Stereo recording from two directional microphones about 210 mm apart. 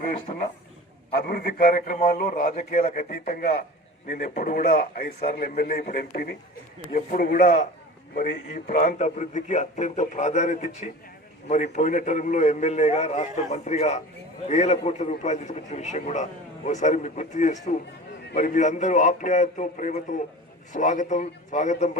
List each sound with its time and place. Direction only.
1.2 s a man's voice: 45° left (ahead or behind)